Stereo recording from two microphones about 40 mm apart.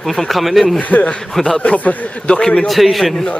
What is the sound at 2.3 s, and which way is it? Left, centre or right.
Speech, left.